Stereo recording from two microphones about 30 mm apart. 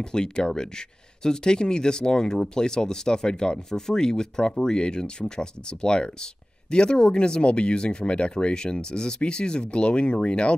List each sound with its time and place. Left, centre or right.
0.0 s speech: left